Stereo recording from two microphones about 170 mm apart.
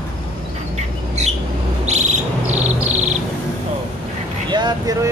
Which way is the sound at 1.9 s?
40° right (ahead or behind).